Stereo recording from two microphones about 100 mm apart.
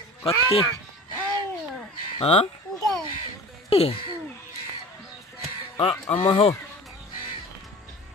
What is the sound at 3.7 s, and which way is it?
Speech, 75° left (ahead or behind).